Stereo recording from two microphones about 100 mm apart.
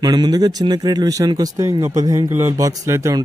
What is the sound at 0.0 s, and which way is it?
Speech, 40° right (ahead or behind).